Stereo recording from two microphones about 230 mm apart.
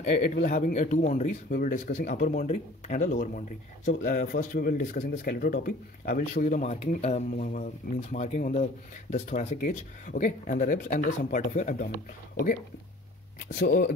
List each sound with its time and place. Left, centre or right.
0.1 s speech: left
13.5 s speech: left